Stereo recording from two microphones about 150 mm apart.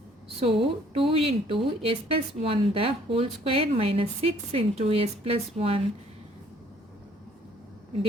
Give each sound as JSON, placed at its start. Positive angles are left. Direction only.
{"t": 0.3, "sound": "speech", "side_deg": -40}